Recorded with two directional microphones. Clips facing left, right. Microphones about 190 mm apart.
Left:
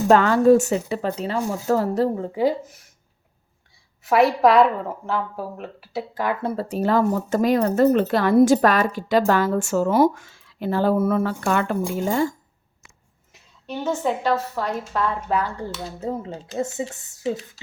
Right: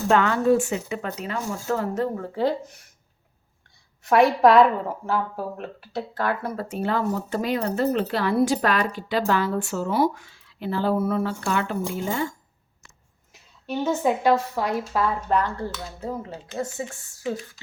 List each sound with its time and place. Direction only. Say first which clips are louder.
0.1 s speech: left 5 dB; 40° left (ahead or behind)
2.1 s speech: left 3 dB; 20° left (ahead or behind)
2.4 s speech: left 2 dB; 5° left (ahead or behind)
4.0 s speech: even; centre (ahead or behind)
6.4 s speech: left 4 dB; 30° left (ahead or behind)
13.3 s a woman's voice: right 2 dB; 5° right (ahead or behind)
15.4 s speech: even; 10° left (ahead or behind)
16.0 s speech: left 5 dB; 25° left (ahead or behind)